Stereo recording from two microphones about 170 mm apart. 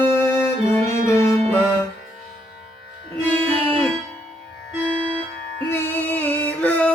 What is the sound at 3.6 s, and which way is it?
Music, 35° right (ahead or behind).